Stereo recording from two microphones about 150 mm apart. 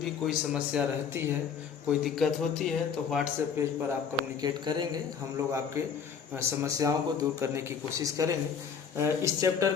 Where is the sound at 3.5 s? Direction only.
15° right (ahead or behind).